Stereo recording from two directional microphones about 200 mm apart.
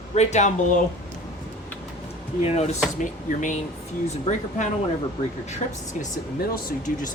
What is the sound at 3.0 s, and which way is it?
Speech, 40° left (ahead or behind).